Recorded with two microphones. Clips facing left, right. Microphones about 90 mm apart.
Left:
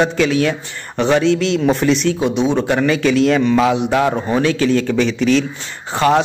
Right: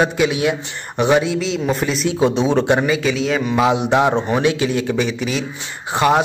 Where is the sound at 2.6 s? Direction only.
20° right (ahead or behind).